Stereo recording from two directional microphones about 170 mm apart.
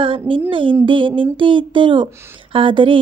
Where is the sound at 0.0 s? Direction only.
30° right (ahead or behind).